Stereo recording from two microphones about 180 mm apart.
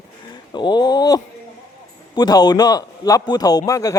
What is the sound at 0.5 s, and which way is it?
A man's voice, 25° left (ahead or behind).